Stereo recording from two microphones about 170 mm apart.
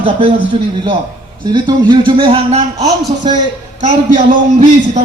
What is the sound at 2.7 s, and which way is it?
Speech, 20° right (ahead or behind).